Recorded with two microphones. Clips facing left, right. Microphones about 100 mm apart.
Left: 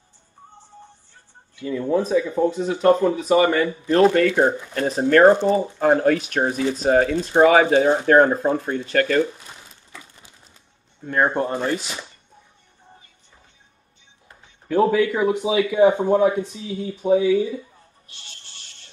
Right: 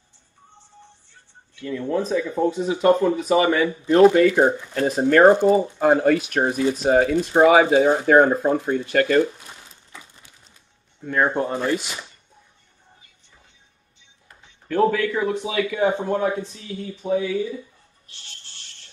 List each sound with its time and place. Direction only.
1.6 s speech: 10° left (ahead or behind)
5.3 s speech: 15° right (ahead or behind)
5.6 s speech: centre (ahead or behind)
11.1 s speech: centre (ahead or behind)
14.7 s speech: 10° left (ahead or behind)